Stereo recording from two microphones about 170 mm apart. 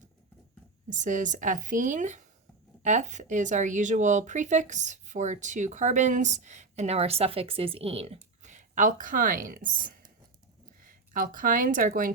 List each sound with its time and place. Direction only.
0.9 s speech: 45° right (ahead or behind)